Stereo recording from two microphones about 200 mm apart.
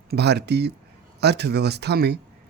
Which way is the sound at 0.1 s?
55° right (ahead or behind).